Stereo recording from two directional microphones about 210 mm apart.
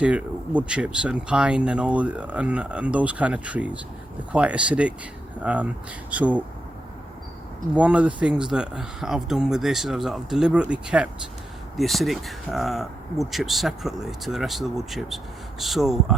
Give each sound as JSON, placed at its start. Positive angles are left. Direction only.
{"t": 0.0, "sound": "speech", "side_deg": -5}
{"t": 7.7, "sound": "speech", "side_deg": -5}